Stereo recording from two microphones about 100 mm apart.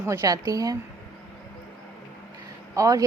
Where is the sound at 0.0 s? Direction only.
30° right (ahead or behind).